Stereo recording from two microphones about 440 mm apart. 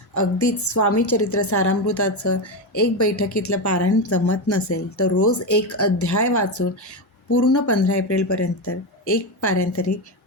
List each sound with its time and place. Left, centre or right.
0.1 s a woman's voice: left